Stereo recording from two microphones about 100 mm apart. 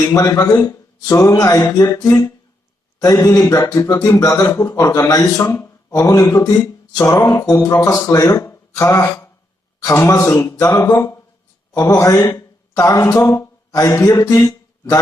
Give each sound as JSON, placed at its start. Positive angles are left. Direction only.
{"t": 0.1, "sound": "a man's voice", "side_deg": 30}